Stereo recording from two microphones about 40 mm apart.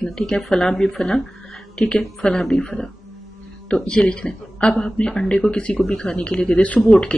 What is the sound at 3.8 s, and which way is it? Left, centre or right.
Speech, left.